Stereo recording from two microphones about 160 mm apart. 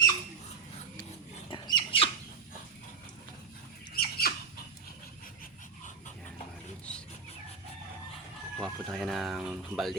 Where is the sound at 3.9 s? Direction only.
75° left (ahead or behind).